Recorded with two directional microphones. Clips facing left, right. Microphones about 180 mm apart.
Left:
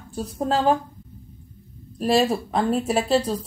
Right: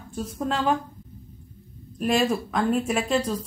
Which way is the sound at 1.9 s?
35° left (ahead or behind).